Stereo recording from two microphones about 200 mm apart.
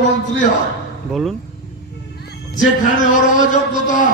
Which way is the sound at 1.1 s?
Centre (ahead or behind).